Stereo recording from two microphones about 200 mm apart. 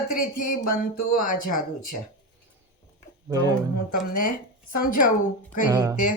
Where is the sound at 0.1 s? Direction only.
45° left (ahead or behind).